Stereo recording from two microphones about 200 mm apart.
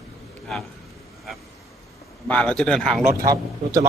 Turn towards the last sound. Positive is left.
turn(degrees=-15)  # may be behind; listen again after turning